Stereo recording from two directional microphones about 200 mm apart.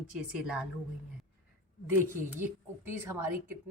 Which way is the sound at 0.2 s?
5° right (ahead or behind).